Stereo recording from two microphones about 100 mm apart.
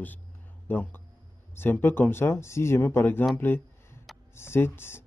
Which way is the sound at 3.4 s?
20° left (ahead or behind).